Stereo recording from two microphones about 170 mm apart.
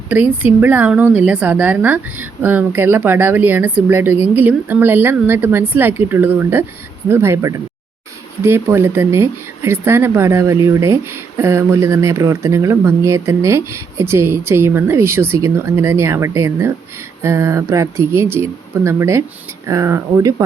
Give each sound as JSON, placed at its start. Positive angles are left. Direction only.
{"t": 0.1, "sound": "speech", "side_deg": -10}